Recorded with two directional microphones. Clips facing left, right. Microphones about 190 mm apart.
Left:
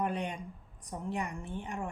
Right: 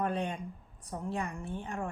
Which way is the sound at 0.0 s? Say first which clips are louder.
Right 1 dB; 15° left (ahead or behind).